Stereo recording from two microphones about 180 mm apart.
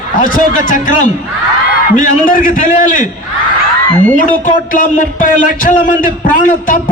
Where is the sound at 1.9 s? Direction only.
50° left (ahead or behind).